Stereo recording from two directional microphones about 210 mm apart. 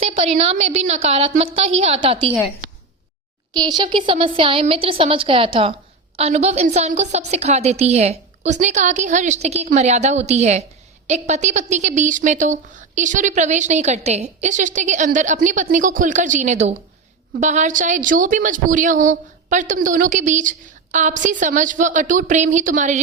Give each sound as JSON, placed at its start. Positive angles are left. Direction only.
{"t": 0.0, "sound": "a woman's voice", "side_deg": -30}
{"t": 3.5, "sound": "a woman's voice", "side_deg": -20}